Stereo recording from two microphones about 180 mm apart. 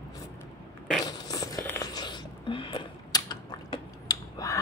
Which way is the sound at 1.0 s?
20° left (ahead or behind).